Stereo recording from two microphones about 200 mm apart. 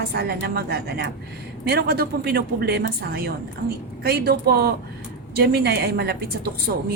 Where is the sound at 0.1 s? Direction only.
50° right (ahead or behind).